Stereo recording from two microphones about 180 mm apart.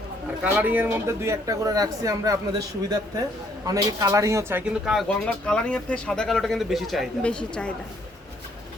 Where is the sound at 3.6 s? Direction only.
20° right (ahead or behind); by 7.7 s 5° left (ahead or behind).